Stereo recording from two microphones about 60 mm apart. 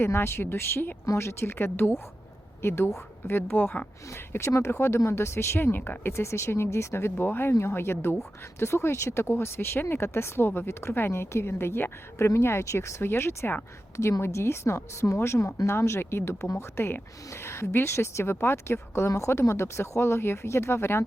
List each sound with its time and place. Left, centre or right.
0.0 s speech: left
1.0 s speech: left
4.3 s speech: left